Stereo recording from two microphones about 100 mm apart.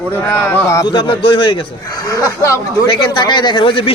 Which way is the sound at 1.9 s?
40° left (ahead or behind).